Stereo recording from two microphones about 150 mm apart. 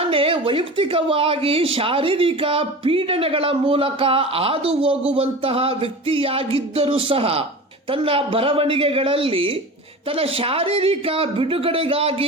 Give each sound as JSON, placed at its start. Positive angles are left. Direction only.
{"t": 0.0, "sound": "a woman's voice", "side_deg": -35}